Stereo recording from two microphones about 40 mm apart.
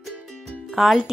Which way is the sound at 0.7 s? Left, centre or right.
Centre.